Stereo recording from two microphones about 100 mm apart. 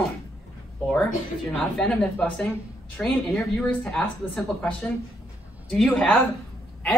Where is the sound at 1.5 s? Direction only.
10° left (ahead or behind).